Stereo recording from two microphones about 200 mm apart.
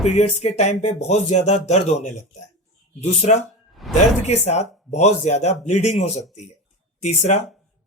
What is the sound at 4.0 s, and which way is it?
Speech, 35° left (ahead or behind).